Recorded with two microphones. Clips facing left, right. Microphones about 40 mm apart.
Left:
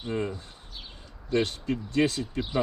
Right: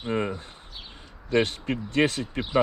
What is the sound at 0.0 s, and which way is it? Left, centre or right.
Speech, right.